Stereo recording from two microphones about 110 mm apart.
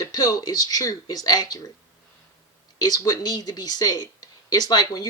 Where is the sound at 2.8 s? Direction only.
35° left (ahead or behind).